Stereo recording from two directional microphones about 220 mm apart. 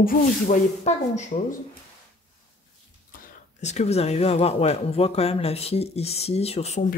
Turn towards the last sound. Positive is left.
turn(degrees=30)  # may be behind; listen again after turning